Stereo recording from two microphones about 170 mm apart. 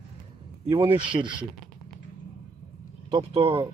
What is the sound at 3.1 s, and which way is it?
Speech, 35° right (ahead or behind).